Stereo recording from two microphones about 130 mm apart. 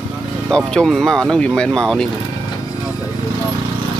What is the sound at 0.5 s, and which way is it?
Speech, 5° left (ahead or behind).